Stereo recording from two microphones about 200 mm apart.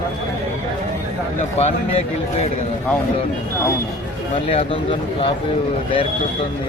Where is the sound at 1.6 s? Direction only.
30° left (ahead or behind).